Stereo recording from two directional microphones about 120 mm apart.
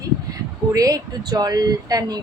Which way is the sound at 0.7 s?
30° right (ahead or behind).